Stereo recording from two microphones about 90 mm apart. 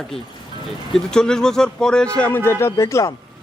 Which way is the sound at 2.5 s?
25° left (ahead or behind).